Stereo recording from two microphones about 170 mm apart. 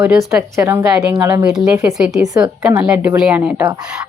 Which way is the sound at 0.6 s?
15° right (ahead or behind).